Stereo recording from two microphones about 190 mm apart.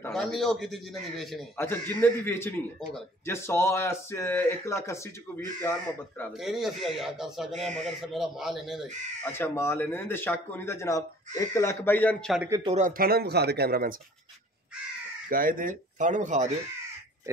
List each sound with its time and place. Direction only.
0.0 s speech: centre (ahead or behind)
1.7 s speech: 10° left (ahead or behind)
6.3 s speech: centre (ahead or behind)
9.2 s speech: 10° left (ahead or behind)
12.4 s speech: 15° right (ahead or behind)
12.7 s speech: 45° right (ahead or behind)
15.2 s speech: 45° right (ahead or behind)